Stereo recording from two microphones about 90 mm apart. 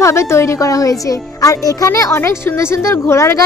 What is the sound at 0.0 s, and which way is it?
A woman's voice, 30° left (ahead or behind).